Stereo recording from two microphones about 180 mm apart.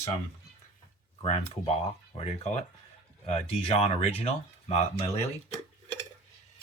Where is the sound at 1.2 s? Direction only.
35° left (ahead or behind).